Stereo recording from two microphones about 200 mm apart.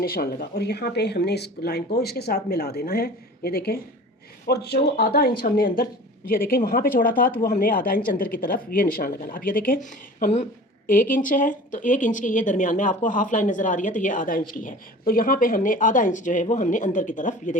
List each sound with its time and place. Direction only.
0.0 s speech: 45° left (ahead or behind)